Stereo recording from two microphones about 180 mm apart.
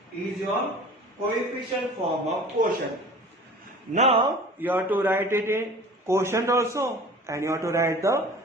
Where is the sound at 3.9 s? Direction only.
35° right (ahead or behind).